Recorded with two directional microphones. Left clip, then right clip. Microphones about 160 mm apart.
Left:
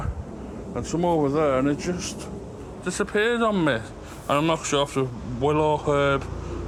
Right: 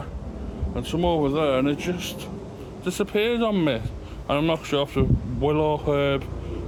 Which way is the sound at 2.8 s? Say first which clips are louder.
Even; 20° right (ahead or behind).